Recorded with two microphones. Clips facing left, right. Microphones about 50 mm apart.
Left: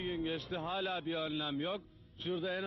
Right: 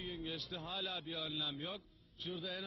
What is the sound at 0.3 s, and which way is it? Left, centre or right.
Speech, left.